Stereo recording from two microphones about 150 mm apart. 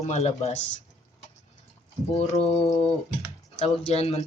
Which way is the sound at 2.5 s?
45° left (ahead or behind).